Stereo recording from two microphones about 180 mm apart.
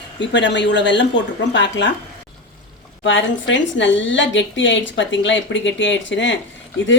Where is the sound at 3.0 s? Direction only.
90° left.